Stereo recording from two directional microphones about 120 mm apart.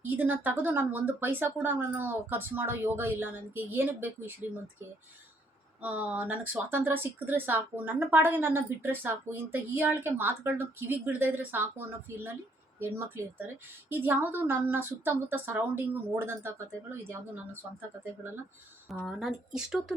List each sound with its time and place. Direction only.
0.0 s speech: 15° right (ahead or behind)
5.8 s speech: 15° right (ahead or behind)
18.9 s speech: centre (ahead or behind)